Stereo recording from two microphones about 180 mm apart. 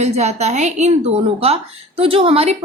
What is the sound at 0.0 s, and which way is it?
Speech, 40° right (ahead or behind).